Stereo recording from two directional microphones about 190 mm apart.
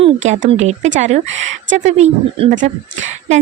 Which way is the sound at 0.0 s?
35° right (ahead or behind).